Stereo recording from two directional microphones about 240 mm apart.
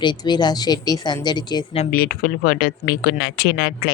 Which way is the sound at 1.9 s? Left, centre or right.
Left.